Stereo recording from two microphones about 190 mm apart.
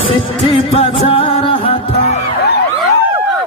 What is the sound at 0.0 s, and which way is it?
Music, 30° left (ahead or behind).